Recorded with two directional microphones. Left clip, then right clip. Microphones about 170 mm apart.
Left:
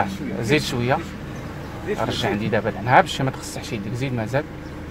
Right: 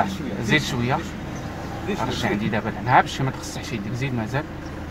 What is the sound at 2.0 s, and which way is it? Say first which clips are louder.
Speech: left 2 dB; 40° left (ahead or behind).